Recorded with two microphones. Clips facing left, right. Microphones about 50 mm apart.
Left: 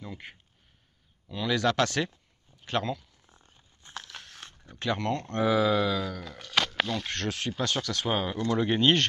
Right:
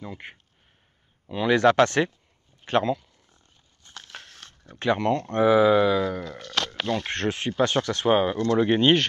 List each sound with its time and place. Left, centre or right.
1.3 s speech: right
3.3 s dog: centre
4.0 s biting: right
4.3 s a sound: centre
4.7 s speech: right
6.2 s speech: centre
7.1 s speech: right
8.1 s speech: centre